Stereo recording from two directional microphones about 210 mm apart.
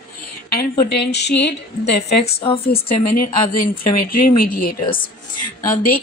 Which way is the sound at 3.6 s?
45° left (ahead or behind).